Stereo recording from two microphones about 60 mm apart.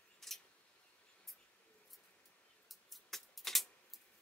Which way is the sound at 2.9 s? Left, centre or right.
Centre.